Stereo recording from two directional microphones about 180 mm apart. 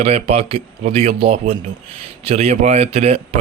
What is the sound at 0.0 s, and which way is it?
Speech, 35° right (ahead or behind).